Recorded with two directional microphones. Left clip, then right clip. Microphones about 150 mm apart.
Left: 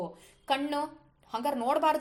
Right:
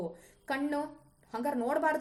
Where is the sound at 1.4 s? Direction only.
25° left (ahead or behind).